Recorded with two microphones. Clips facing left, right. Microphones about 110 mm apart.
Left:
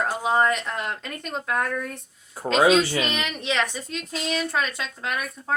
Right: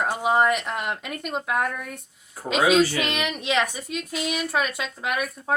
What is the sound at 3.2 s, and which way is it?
Speech, 15° right (ahead or behind).